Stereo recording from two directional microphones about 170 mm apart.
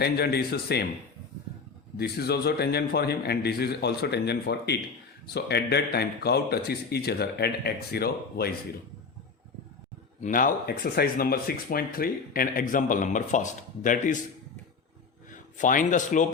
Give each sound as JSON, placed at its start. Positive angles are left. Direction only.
{"t": 0.0, "sound": "speech", "side_deg": 70}
{"t": 2.0, "sound": "speech", "side_deg": 70}
{"t": 10.2, "sound": "speech", "side_deg": 50}
{"t": 15.3, "sound": "a man's voice", "side_deg": 50}